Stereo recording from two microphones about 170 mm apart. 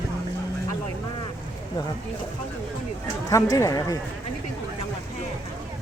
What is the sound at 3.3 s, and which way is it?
Speech, 20° left (ahead or behind).